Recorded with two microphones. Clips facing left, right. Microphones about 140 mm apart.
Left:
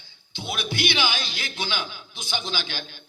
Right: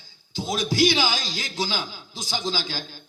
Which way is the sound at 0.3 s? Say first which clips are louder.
Right 7 dB; 35° right (ahead or behind).